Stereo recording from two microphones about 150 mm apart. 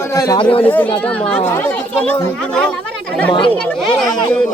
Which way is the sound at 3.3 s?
35° left (ahead or behind).